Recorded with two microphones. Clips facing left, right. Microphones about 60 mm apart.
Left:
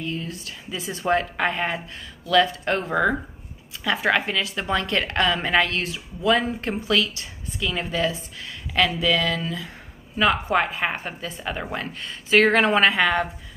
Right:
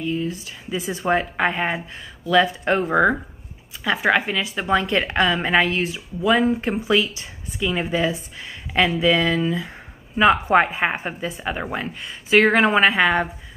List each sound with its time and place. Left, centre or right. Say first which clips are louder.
0.0 s a woman's voice: right 5 dB; centre